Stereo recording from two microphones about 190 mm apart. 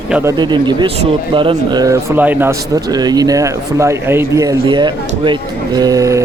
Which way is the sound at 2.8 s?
20° right (ahead or behind).